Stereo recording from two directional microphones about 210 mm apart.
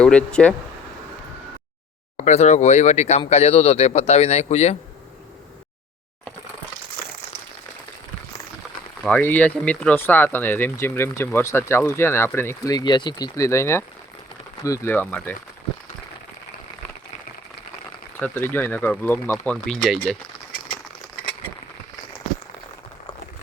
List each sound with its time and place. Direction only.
0.0 s speech: 5° left (ahead or behind)
2.1 s speech: 35° left (ahead or behind)
9.0 s speech: 5° left (ahead or behind)
18.2 s speech: 10° left (ahead or behind)